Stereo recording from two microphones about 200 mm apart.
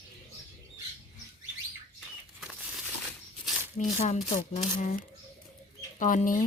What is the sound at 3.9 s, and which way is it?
Speech, 35° left (ahead or behind).